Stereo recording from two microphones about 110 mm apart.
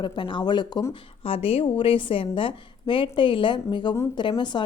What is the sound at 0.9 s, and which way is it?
A woman's voice, 55° left (ahead or behind).